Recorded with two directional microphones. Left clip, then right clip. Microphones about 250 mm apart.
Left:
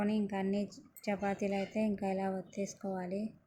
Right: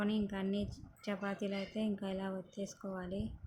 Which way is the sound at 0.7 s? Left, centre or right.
Right.